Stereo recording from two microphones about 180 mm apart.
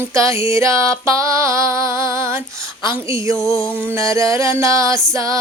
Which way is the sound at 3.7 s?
10° right (ahead or behind).